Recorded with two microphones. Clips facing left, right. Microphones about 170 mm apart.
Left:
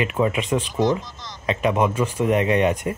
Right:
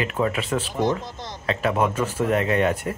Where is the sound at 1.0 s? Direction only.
55° right (ahead or behind).